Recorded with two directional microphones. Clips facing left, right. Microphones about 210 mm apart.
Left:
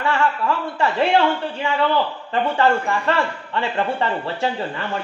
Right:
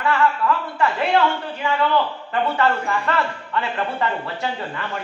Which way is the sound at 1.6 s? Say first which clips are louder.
Even; 30° left (ahead or behind).